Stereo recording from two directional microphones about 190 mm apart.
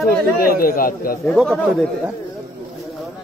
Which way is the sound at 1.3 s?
5° left (ahead or behind).